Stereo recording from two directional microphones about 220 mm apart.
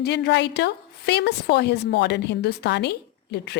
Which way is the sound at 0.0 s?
50° left (ahead or behind).